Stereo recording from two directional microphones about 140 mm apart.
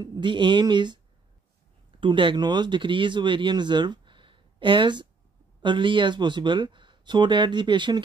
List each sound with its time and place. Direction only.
0.0 s speech: 30° right (ahead or behind)